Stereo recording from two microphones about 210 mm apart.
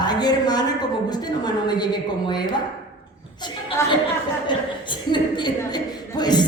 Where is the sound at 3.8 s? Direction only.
15° left (ahead or behind).